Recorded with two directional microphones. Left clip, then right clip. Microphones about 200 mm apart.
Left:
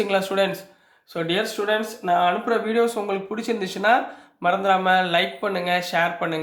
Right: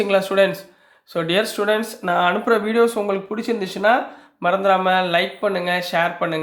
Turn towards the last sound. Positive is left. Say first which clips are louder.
# right 2 dB
turn(degrees=-15)  # may be behind; listen again after turning